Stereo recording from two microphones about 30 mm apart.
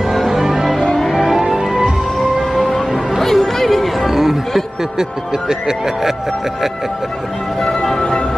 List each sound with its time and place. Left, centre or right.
0.3 s music: centre
2.1 s music: centre
4.1 s music: centre
5.5 s speech: right